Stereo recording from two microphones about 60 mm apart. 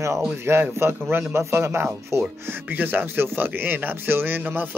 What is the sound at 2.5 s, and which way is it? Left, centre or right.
A man's voice, right.